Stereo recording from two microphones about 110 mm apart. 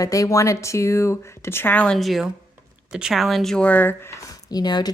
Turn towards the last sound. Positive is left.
turn(degrees=40)  # may be behind; listen again after turning